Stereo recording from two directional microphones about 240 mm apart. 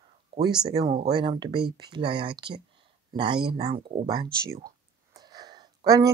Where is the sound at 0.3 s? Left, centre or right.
Centre.